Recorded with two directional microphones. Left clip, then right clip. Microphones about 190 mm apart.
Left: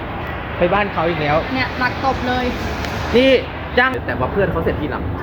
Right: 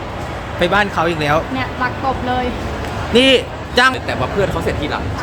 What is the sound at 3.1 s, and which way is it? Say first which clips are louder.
Speech: right 2 dB; 15° right (ahead or behind).